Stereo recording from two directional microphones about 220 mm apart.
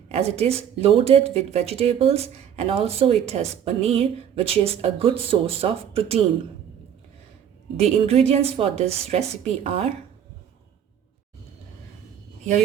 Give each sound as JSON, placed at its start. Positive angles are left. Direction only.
{"t": 0.1, "sound": "a woman's voice", "side_deg": -30}
{"t": 8.0, "sound": "a woman's voice", "side_deg": -30}